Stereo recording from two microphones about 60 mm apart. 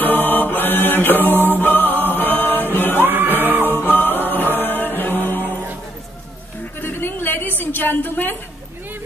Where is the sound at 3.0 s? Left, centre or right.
Right.